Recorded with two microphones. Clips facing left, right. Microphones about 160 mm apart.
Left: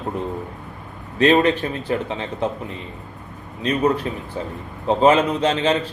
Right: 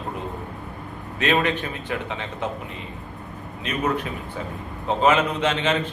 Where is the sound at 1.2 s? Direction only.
35° left (ahead or behind).